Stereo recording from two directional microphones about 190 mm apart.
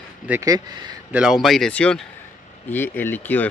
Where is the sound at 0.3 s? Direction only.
15° right (ahead or behind).